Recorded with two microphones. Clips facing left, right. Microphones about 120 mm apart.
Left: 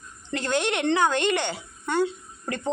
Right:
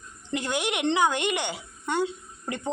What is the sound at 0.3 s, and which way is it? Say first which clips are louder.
A man's voice: left 3 dB; 15° right (ahead or behind).